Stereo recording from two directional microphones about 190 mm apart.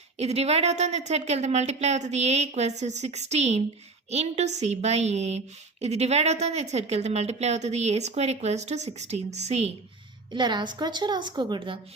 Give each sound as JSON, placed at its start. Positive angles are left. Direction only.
{"t": 0.2, "sound": "a woman's voice", "side_deg": -35}
{"t": 10.3, "sound": "a woman's voice", "side_deg": -25}